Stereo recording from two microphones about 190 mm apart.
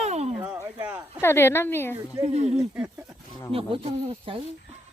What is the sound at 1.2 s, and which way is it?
Speech, 10° left (ahead or behind).